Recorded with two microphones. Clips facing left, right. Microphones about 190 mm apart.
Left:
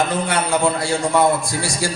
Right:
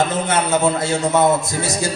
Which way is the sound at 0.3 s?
20° right (ahead or behind).